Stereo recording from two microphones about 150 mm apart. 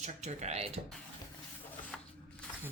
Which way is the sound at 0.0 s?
50° right (ahead or behind).